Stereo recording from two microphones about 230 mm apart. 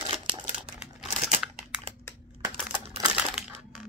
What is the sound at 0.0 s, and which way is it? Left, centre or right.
Crumpling, right.